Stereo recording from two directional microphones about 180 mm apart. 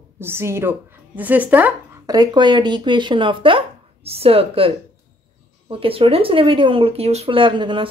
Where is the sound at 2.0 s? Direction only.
25° right (ahead or behind).